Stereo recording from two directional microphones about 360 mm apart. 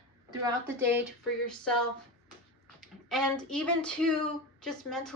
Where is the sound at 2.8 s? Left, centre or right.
Centre.